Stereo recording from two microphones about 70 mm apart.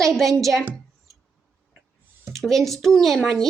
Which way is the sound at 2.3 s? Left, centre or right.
Centre.